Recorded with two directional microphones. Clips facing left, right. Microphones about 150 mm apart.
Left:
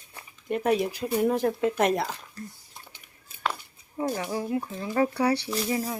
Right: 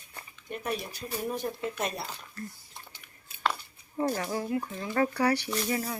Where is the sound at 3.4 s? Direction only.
5° left (ahead or behind).